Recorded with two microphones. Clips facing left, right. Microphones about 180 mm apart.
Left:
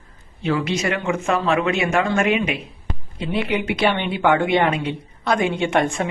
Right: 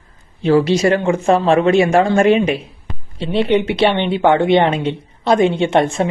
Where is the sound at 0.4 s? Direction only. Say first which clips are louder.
Right 9 dB; 30° right (ahead or behind).